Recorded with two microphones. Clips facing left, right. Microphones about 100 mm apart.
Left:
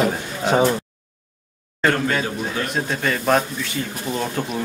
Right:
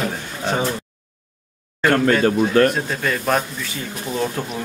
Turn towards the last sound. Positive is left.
turn(degrees=0)  # may be behind; listen again after turning